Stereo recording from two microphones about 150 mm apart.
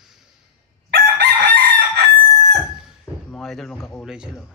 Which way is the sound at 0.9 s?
90° right.